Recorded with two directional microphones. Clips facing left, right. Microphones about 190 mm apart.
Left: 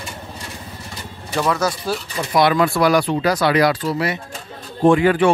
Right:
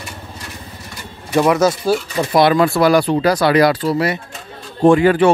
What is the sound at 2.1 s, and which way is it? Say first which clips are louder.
Speech: right 2 dB; 30° right (ahead or behind).